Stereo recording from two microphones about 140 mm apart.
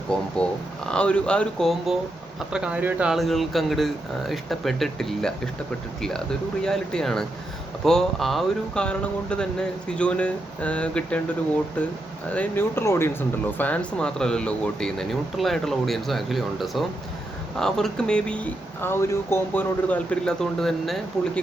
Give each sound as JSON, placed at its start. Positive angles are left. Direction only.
{"t": 0.1, "sound": "speech", "side_deg": 5}